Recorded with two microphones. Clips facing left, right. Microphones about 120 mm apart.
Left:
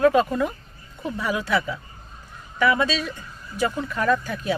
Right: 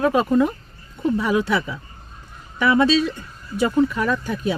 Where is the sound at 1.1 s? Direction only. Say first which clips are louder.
Right 2 dB; 25° right (ahead or behind).